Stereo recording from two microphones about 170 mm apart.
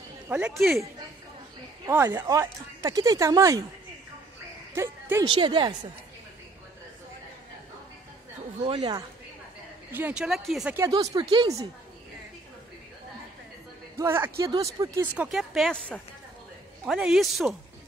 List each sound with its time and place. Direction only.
0.3 s a woman's voice: 5° right (ahead or behind)
1.9 s speech: 15° right (ahead or behind)
4.7 s a woman's voice: 15° right (ahead or behind)
5.2 s speech: 30° right (ahead or behind)
8.6 s speech: 25° right (ahead or behind)
9.9 s a woman's voice: 10° right (ahead or behind)
10.7 s speech: 20° right (ahead or behind)
13.9 s speech: 15° right (ahead or behind)
15.1 s a woman's voice: centre (ahead or behind)